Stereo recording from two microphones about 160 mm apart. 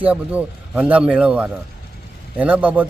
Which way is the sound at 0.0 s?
10° right (ahead or behind).